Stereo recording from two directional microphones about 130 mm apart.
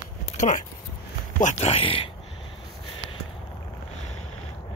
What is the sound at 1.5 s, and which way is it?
Speech, 50° left (ahead or behind).